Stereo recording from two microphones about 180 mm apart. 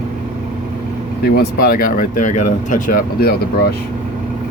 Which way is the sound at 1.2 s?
55° left (ahead or behind).